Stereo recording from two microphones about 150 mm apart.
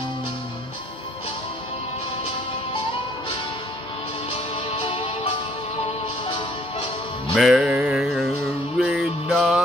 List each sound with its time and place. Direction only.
4.3 s music: 35° left (ahead or behind)
7.3 s music: 5° right (ahead or behind)
8.7 s mantra: 5° right (ahead or behind)